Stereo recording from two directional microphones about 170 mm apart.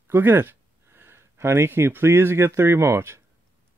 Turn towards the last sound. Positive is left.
turn(degrees=-15)  # may be behind; listen again after turning